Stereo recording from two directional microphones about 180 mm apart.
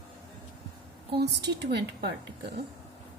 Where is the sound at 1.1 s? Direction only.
65° right (ahead or behind).